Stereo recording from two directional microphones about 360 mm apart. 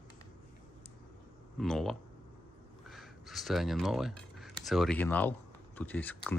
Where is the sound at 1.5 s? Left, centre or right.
Centre.